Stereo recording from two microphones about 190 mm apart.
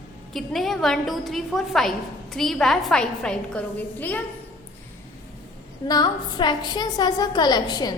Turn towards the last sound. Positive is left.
turn(degrees=20)  # may be behind; listen again after turning